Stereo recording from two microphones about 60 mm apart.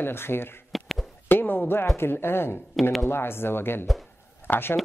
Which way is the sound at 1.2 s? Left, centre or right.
Left.